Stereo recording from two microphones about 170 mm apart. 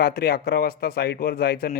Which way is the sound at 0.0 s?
65° left (ahead or behind).